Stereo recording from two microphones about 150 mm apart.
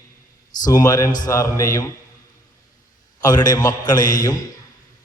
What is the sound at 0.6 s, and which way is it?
A man's voice, 25° left (ahead or behind).